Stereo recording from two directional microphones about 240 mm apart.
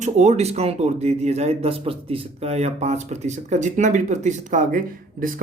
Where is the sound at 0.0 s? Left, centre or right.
Right.